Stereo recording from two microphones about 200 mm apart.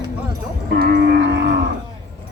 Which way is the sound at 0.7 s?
50° right (ahead or behind).